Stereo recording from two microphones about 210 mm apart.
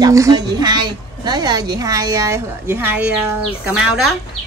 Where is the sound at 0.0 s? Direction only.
15° right (ahead or behind).